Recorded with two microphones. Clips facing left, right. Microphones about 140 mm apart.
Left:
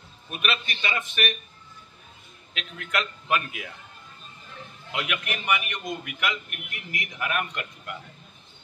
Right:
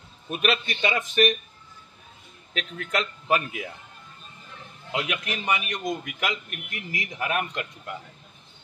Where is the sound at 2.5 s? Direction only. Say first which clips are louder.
Right 2 dB; 30° right (ahead or behind).